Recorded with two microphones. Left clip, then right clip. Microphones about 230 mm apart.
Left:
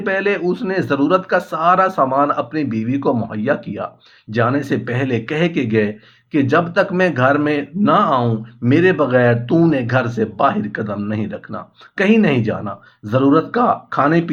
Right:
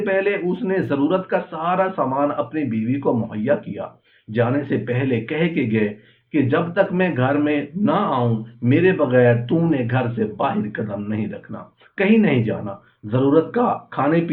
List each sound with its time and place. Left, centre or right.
0.0 s speech: left